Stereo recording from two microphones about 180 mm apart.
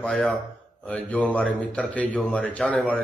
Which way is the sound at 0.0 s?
5° left (ahead or behind).